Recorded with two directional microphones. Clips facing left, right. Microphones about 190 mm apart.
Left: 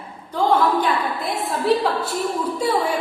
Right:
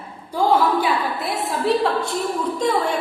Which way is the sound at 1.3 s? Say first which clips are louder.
Left 1 dB; centre (ahead or behind).